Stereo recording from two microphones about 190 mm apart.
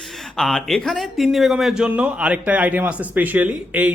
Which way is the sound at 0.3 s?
Centre (ahead or behind).